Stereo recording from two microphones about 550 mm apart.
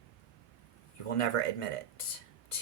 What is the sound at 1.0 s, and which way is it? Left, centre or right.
Speech, left.